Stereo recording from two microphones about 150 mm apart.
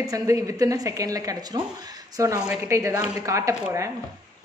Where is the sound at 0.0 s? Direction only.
20° right (ahead or behind).